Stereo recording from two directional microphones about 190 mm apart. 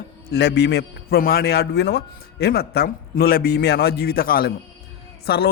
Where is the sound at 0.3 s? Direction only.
60° left (ahead or behind).